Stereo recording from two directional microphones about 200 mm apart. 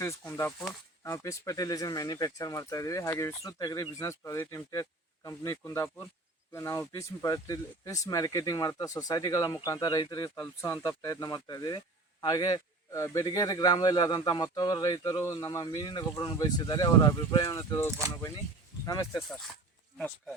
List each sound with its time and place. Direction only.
0.0 s a man's voice: 15° left (ahead or behind)
20.0 s speech: 10° left (ahead or behind)